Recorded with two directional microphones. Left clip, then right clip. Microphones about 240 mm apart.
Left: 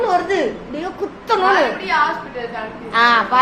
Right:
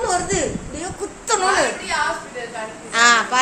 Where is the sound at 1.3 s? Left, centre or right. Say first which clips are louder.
Left 3 dB; centre.